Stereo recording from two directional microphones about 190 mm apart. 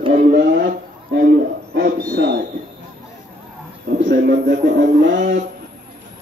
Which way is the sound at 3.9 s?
70° right (ahead or behind).